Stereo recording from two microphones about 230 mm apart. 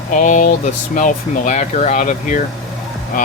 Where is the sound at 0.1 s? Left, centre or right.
Left.